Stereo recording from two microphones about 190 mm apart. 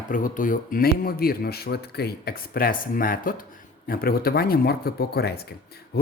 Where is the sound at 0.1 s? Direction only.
45° left (ahead or behind).